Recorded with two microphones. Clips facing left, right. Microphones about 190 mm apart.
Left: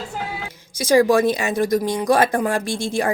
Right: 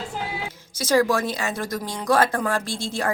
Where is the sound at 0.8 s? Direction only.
15° left (ahead or behind).